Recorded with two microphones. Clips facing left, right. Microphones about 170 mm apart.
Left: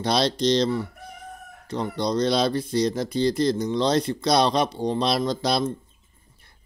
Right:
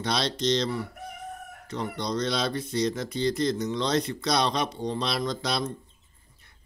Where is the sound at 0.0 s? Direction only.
35° left (ahead or behind).